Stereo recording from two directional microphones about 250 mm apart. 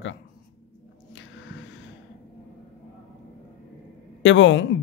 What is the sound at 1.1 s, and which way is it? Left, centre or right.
Squish, left.